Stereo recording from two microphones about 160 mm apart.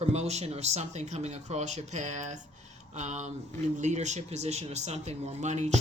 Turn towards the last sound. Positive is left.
turn(degrees=-45)  # may be behind; listen again after turning